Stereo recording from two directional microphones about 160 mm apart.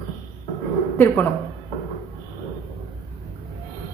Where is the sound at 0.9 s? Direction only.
15° left (ahead or behind).